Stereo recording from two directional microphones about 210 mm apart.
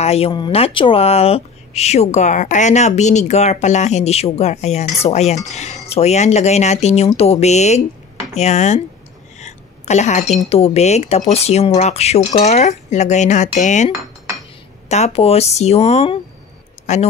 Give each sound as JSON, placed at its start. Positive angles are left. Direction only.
{"t": 0.0, "sound": "speech", "side_deg": 30}